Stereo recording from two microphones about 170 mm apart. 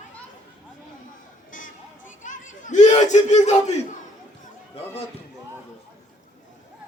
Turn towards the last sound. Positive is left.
turn(degrees=35)  # may be behind; listen again after turning